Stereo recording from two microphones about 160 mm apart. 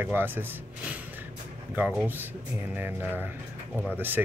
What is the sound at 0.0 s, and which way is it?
Speech, 15° right (ahead or behind).